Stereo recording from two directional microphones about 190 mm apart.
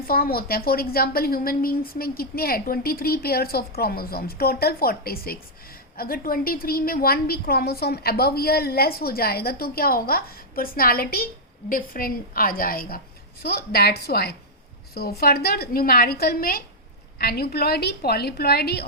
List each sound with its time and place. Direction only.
0.1 s a woman's voice: 50° left (ahead or behind)